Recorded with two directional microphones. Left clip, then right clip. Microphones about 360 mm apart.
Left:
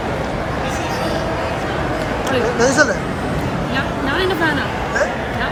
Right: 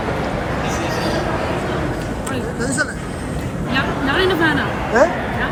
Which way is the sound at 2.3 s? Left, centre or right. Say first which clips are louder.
Left 8 dB; centre.